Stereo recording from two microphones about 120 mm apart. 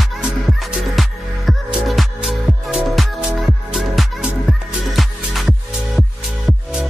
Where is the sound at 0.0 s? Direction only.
Centre (ahead or behind).